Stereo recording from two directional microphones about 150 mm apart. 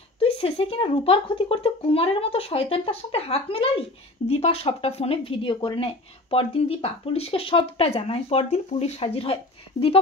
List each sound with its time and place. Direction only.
0.2 s speech: 40° left (ahead or behind)